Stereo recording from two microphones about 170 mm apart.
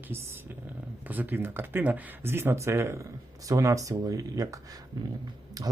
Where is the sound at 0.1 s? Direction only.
15° right (ahead or behind).